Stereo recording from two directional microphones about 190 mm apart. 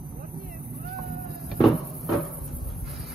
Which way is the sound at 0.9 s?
55° right (ahead or behind).